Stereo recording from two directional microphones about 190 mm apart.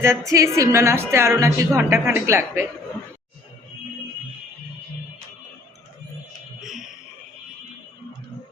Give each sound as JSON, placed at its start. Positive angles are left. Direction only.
{"t": 0.0, "sound": "a woman's voice", "side_deg": -15}
{"t": 6.6, "sound": "music", "side_deg": 0}